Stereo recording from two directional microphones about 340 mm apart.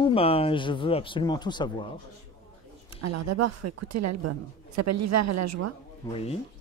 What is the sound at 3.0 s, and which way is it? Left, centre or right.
Speech, right.